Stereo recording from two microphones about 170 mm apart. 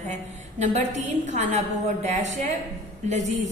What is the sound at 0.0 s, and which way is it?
A woman's voice, 45° right (ahead or behind).